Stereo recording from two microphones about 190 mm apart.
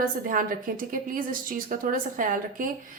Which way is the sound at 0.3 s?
45° right (ahead or behind).